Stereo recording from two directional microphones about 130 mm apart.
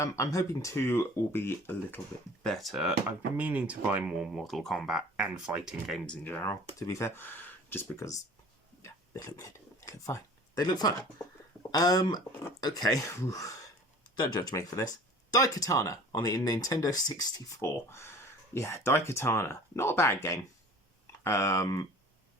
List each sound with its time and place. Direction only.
0.0 s speech: 25° left (ahead or behind)
2.4 s speech: 5° left (ahead or behind)
4.3 s speech: centre (ahead or behind)
6.1 s speech: 15° left (ahead or behind)
8.8 s a sound: 25° left (ahead or behind)
11.7 s speech: 30° left (ahead or behind)